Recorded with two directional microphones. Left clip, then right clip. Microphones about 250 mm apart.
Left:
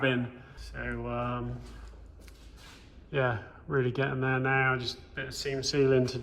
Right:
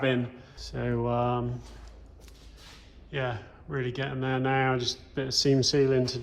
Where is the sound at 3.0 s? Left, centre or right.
Centre.